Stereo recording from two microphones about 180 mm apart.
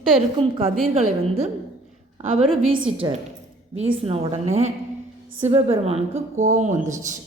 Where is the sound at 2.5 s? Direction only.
30° right (ahead or behind).